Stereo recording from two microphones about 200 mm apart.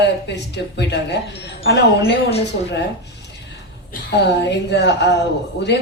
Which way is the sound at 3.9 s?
55° left (ahead or behind).